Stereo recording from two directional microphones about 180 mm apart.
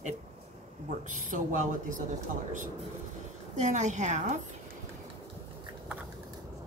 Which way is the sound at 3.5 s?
40° right (ahead or behind).